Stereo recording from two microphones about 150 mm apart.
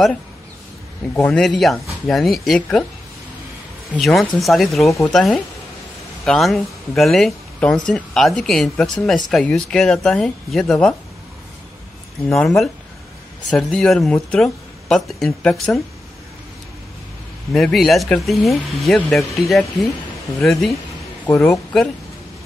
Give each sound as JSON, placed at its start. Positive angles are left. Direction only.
{"t": 1.3, "sound": "speech", "side_deg": 0}
{"t": 4.0, "sound": "speech", "side_deg": 0}
{"t": 12.3, "sound": "speech", "side_deg": 0}
{"t": 17.5, "sound": "speech", "side_deg": 0}
{"t": 21.3, "sound": "speech", "side_deg": 20}